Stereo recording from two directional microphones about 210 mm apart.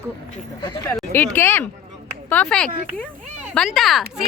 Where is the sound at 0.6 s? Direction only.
15° left (ahead or behind).